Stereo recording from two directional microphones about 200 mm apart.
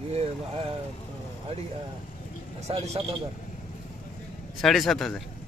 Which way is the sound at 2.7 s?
30° right (ahead or behind).